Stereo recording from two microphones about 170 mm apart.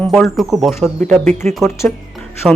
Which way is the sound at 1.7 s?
15° left (ahead or behind).